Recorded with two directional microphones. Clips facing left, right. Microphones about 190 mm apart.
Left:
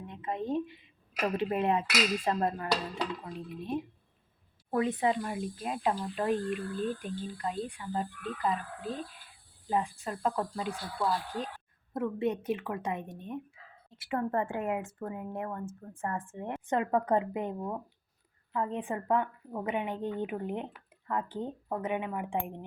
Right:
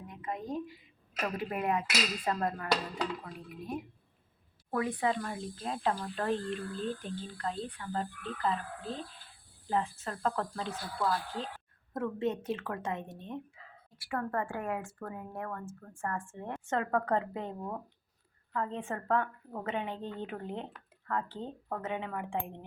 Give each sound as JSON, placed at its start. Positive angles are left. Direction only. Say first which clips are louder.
{"t": 0.1, "sound": "a woman's voice", "louder": "left 5 dB", "side_deg": 25}
{"t": 13.9, "sound": "a woman's voice", "louder": "left 3 dB", "side_deg": 20}